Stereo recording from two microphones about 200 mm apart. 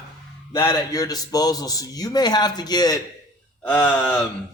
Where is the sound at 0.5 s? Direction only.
20° left (ahead or behind).